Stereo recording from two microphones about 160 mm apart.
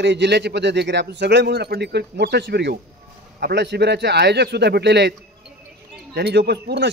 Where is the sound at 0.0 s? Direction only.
90° right.